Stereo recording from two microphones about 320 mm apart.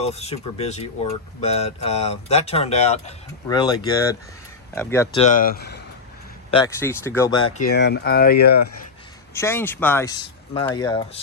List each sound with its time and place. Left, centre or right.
0.0 s speech: centre
5.2 s speech: left
6.5 s speech: centre
7.7 s speech: left
9.3 s speech: centre